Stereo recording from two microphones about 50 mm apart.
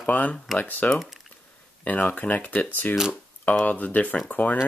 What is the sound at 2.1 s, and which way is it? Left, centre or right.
Speech, left.